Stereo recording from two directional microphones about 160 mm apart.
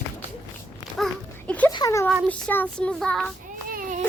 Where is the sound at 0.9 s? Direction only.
5° left (ahead or behind).